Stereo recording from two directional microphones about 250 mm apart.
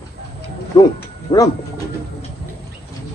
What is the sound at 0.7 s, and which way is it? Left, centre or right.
Speech, centre.